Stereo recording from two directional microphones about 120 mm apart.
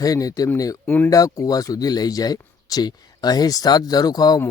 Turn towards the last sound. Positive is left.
turn(degrees=30)  # may be behind; listen again after turning